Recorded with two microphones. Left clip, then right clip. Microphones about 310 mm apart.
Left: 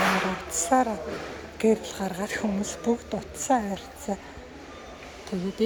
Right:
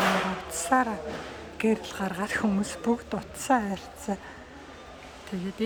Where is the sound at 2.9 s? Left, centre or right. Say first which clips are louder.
Left 2 dB; right.